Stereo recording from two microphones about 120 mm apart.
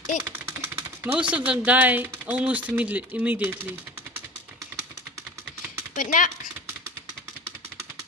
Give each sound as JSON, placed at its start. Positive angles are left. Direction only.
{"t": 0.2, "sound": "a sound", "side_deg": -20}
{"t": 1.3, "sound": "speech", "side_deg": -10}
{"t": 6.0, "sound": "speech", "side_deg": 90}